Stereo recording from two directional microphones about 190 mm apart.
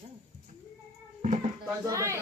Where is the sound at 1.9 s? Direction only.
15° right (ahead or behind).